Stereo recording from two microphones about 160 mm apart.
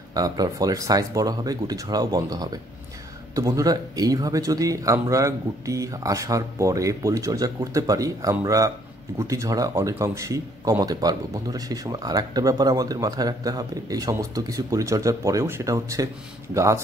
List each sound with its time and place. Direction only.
0.1 s speech: 25° right (ahead or behind)